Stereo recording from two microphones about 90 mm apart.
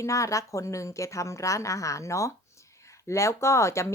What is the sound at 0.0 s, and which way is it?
Speech, 35° left (ahead or behind).